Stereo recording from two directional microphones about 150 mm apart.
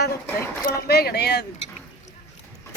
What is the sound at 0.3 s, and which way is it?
Speech, 15° left (ahead or behind).